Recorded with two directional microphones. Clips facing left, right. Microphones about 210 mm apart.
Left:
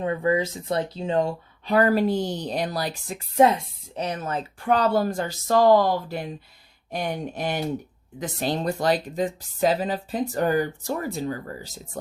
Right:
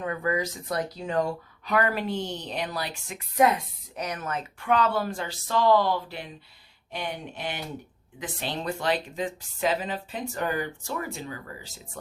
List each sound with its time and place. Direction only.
0.0 s speech: 25° left (ahead or behind)